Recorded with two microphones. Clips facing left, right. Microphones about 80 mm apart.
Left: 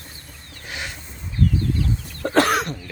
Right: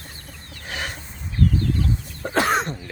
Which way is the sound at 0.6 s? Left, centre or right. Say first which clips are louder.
Right 2 dB; right.